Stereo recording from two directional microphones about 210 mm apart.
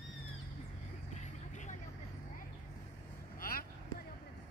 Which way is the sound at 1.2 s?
35° left (ahead or behind).